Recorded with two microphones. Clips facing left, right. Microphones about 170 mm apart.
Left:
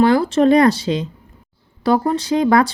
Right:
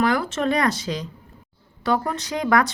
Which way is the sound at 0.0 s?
30° left (ahead or behind).